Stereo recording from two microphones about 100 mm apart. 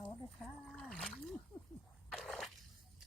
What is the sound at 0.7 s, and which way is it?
Splash, 5° left (ahead or behind).